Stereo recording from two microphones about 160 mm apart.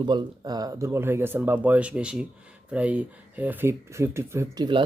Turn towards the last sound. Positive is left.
turn(degrees=-25)  # may be behind; listen again after turning